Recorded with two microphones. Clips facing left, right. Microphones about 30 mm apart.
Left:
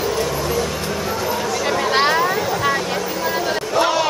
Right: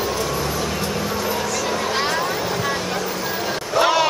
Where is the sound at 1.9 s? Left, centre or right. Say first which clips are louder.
Left 8 dB; left.